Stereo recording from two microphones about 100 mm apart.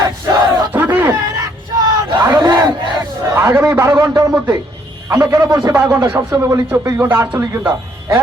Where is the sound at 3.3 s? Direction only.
25° right (ahead or behind).